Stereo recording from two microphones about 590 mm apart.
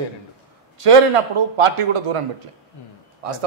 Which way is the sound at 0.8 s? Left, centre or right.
Right.